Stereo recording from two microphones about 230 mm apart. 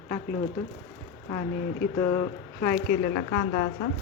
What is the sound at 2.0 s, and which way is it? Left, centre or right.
Speech, centre.